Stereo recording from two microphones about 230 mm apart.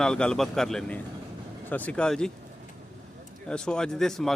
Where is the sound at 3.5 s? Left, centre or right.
Centre.